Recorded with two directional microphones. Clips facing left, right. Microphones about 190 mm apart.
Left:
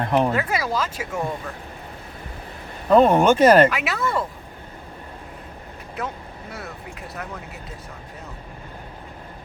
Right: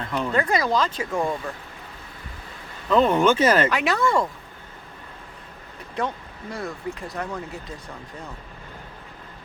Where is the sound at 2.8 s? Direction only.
45° left (ahead or behind).